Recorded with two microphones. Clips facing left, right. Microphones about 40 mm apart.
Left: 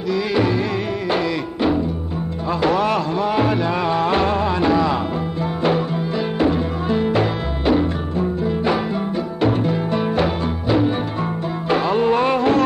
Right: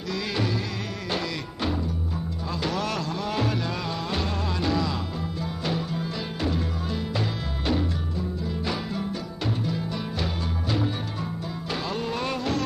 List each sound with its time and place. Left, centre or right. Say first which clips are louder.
0.1 s music: left 9 dB; centre; by 7.2 s left
7.6 s music: left 9 dB; left